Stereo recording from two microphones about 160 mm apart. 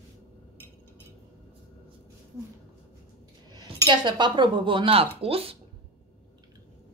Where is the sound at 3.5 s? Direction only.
30° right (ahead or behind).